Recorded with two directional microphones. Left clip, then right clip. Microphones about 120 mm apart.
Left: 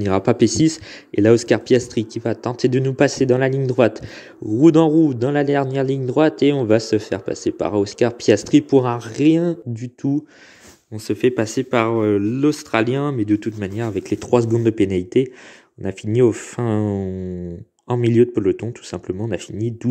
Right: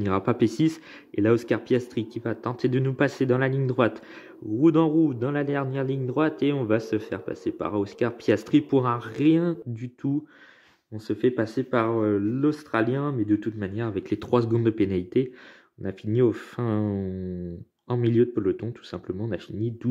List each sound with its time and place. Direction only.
0.0 s a man's voice: 30° left (ahead or behind)
11.1 s speech: 60° left (ahead or behind)
13.9 s a man's voice: 30° left (ahead or behind)
18.0 s a man's voice: 35° left (ahead or behind)